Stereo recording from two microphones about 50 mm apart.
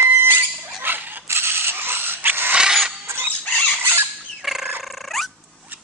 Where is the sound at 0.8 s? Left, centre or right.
Right.